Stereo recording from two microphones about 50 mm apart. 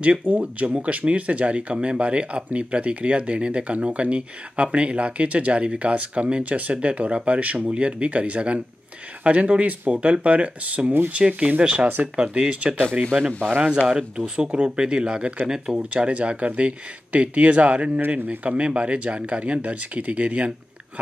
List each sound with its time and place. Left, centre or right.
0.4 s speech: right
15.9 s speech: right